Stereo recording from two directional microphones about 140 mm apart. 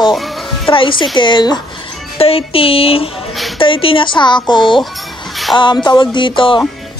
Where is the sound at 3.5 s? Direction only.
40° left (ahead or behind).